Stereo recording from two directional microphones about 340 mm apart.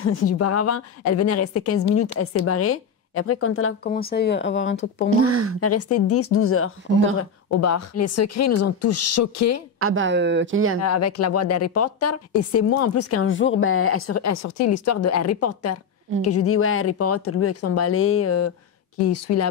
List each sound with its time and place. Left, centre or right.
0.0 s a woman's voice: left
3.9 s speech: left
4.7 s speech: left
5.2 s speech: right
5.6 s a woman's voice: left
9.8 s speech: right
10.8 s a woman's voice: left